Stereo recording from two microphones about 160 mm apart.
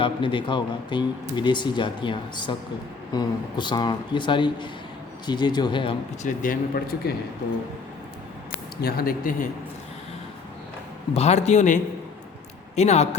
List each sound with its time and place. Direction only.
0.0 s speech: 30° left (ahead or behind)
6.2 s speech: 55° left (ahead or behind)
8.8 s speech: 70° left (ahead or behind)
11.1 s a man's voice: 45° left (ahead or behind)